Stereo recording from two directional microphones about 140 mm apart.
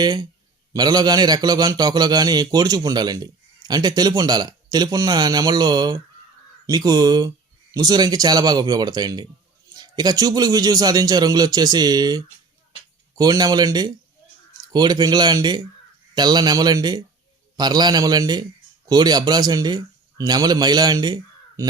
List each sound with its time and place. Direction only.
0.0 s a man's voice: 30° right (ahead or behind)